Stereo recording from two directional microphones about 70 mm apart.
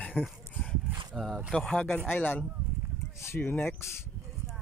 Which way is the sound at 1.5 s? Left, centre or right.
Centre.